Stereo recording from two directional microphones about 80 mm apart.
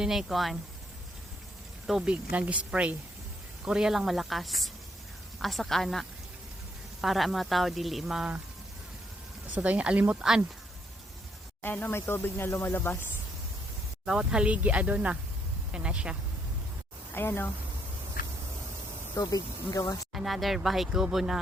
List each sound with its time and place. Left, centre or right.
0.0 s speech: centre
1.9 s speech: centre
2.3 s speech: centre
9.6 s speech: centre
11.6 s speech: left
14.0 s speech: centre
17.2 s speech: left
19.1 s speech: left
20.1 s speech: centre